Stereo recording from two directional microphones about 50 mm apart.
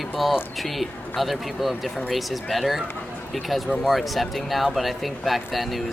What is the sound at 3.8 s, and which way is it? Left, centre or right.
Speech, centre.